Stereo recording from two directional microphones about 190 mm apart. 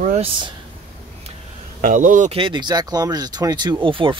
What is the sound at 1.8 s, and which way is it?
Speech, 45° right (ahead or behind).